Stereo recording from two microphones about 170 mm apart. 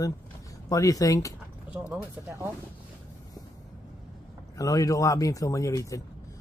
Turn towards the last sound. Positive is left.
turn(degrees=20)  # may be behind; listen again after turning